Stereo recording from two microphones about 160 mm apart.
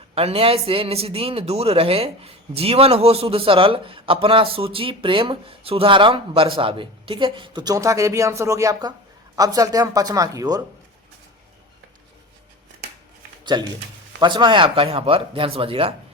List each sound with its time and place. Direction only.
0.1 s a man's voice: 35° right (ahead or behind); by 10.6 s 20° right (ahead or behind)
13.4 s a man's voice: 25° right (ahead or behind)